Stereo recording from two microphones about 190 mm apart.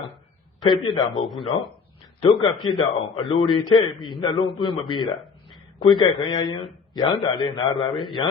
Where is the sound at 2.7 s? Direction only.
25° left (ahead or behind).